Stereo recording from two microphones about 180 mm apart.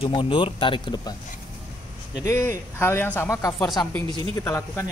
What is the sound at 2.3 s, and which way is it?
Speech, 15° left (ahead or behind).